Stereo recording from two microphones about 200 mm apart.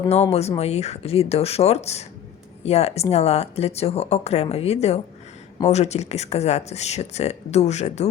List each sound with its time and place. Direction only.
0.1 s speech: 30° left (ahead or behind)